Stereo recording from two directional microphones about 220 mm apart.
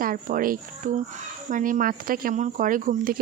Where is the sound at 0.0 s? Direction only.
40° right (ahead or behind).